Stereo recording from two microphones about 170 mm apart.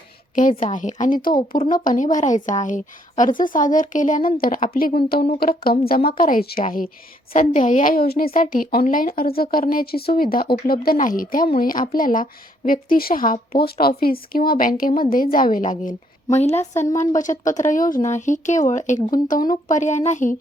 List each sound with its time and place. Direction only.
0.3 s a woman's voice: 50° left (ahead or behind)